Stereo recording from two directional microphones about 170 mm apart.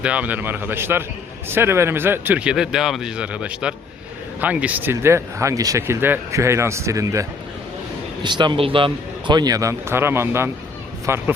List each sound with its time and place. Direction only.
0.0 s speech: 10° right (ahead or behind)